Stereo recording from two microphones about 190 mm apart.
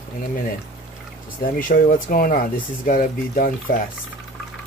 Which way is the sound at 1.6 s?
45° left (ahead or behind).